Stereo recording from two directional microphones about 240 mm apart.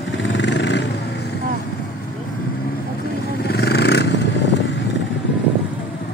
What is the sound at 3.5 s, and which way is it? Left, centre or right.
Vehicle, left.